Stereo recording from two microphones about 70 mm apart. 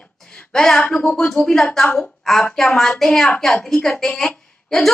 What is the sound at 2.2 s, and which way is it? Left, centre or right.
A woman's voice, centre.